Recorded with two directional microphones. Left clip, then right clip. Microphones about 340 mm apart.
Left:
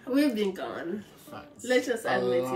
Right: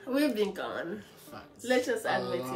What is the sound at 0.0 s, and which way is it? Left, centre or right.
Speech, centre.